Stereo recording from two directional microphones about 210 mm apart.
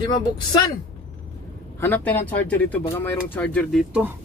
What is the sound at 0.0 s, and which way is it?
Speech, 20° left (ahead or behind).